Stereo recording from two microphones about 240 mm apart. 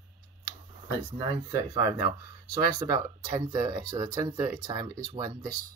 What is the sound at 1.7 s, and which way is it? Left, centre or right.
Speech, centre.